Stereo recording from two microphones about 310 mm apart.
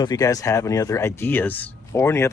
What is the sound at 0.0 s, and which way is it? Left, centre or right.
Speech, centre.